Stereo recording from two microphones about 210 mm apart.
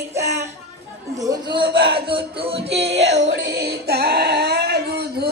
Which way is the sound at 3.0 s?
55° right (ahead or behind).